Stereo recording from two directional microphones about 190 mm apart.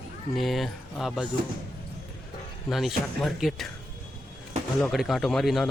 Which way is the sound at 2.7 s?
Centre (ahead or behind).